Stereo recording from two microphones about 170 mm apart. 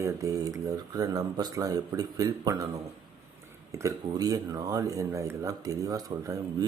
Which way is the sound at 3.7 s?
20° right (ahead or behind).